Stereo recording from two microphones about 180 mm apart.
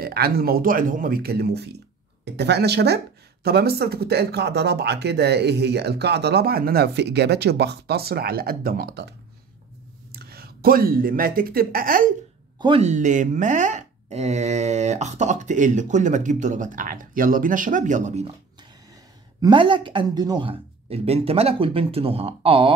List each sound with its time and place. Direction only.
0.0 s speech: 60° right (ahead or behind)
10.1 s speech: 60° right (ahead or behind)
12.5 s speech: 25° right (ahead or behind)
12.8 s speech: 40° right (ahead or behind)
19.4 s speech: 25° right (ahead or behind)